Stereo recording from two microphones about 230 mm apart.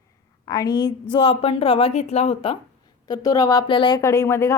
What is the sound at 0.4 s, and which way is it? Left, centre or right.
A woman's voice, centre.